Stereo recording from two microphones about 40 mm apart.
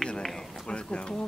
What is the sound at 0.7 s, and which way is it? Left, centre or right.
Speech, left.